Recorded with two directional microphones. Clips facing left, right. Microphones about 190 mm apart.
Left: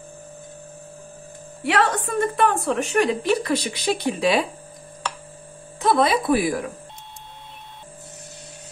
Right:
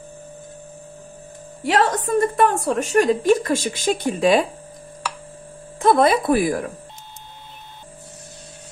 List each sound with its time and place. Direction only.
1.6 s a woman's voice: 35° right (ahead or behind)
5.8 s a woman's voice: 50° right (ahead or behind)